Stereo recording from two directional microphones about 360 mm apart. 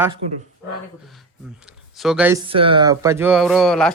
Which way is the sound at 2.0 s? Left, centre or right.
Centre.